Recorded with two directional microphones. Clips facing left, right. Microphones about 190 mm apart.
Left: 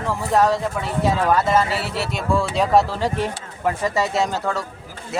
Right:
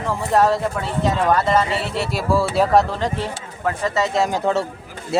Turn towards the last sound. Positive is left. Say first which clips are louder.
# right 4 dB
turn(degrees=-15)  # may be behind; listen again after turning